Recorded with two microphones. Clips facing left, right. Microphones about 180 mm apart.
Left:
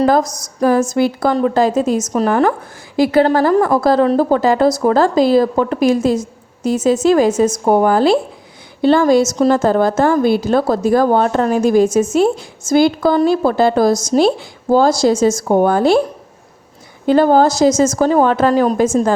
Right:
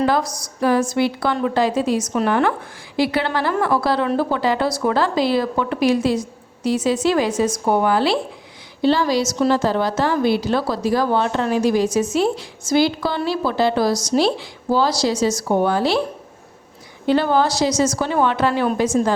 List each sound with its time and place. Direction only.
0.0 s a woman's voice: 45° left (ahead or behind)
17.1 s a woman's voice: 45° left (ahead or behind)